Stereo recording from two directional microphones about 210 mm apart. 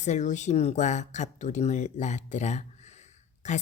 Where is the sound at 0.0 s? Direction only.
35° left (ahead or behind).